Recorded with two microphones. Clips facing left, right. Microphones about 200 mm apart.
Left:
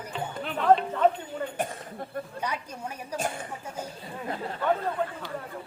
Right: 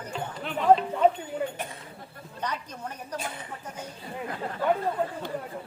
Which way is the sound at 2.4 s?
10° left (ahead or behind).